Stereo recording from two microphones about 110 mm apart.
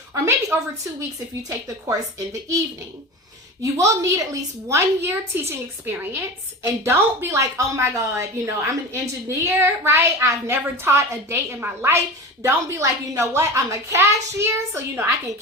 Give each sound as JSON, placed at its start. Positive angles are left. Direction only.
{"t": 0.5, "sound": "a woman's voice", "side_deg": -20}
{"t": 1.5, "sound": "a woman's voice", "side_deg": -30}